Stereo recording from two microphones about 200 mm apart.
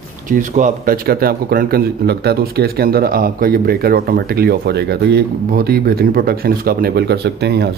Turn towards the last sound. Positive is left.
turn(degrees=-55)  # may be behind; listen again after turning